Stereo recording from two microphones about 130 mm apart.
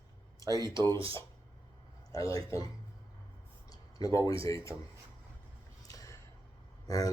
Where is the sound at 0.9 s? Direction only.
45° right (ahead or behind).